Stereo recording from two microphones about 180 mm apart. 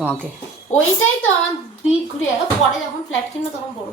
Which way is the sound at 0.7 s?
40° left (ahead or behind).